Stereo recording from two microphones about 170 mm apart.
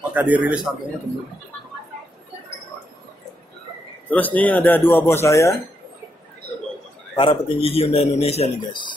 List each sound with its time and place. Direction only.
0.1 s a man's voice: 10° right (ahead or behind)
4.1 s speech: 10° left (ahead or behind)
7.2 s a man's voice: 30° left (ahead or behind)